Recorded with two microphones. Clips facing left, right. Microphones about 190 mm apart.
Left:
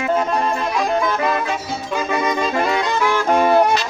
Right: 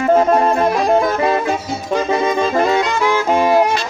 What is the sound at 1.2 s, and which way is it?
Music, 30° right (ahead or behind).